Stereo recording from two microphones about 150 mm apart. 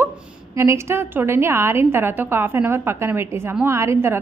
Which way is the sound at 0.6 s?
15° right (ahead or behind).